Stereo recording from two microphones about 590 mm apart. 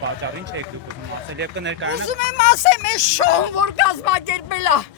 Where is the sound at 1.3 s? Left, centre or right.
Centre.